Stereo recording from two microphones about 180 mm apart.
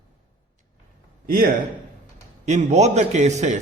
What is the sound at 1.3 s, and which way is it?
Speech, 50° right (ahead or behind).